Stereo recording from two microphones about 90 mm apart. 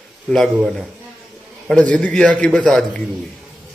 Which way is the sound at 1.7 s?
10° left (ahead or behind).